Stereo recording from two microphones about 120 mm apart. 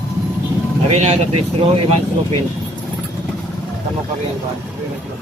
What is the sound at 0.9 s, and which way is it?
Speech, 65° right (ahead or behind).